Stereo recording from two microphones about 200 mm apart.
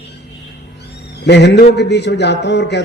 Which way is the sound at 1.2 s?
55° left (ahead or behind).